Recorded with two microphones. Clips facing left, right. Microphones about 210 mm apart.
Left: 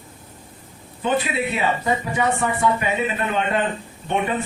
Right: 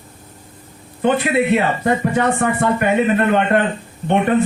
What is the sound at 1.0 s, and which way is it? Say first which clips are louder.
A man's voice: right 6 dB; 60° right (ahead or behind).